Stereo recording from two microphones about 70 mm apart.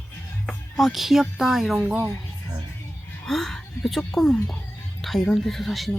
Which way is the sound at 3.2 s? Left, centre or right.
Centre.